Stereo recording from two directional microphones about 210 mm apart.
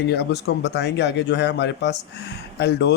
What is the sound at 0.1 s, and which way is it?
A man's voice, 50° left (ahead or behind).